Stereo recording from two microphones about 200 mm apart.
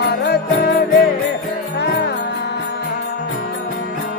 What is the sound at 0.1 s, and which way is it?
Music, 55° left (ahead or behind).